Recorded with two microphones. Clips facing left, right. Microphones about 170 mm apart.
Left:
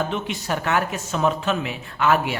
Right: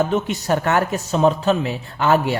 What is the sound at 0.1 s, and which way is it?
Speech, 40° right (ahead or behind).